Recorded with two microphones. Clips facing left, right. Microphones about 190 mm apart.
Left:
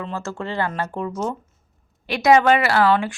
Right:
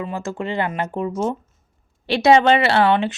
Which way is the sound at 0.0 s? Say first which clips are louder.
Right 2 dB; 15° right (ahead or behind).